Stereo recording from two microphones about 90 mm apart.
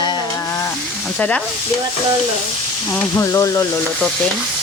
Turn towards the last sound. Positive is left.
turn(degrees=35)  # may be behind; listen again after turning